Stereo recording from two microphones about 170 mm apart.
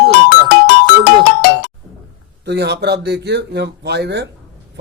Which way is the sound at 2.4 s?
75° right (ahead or behind).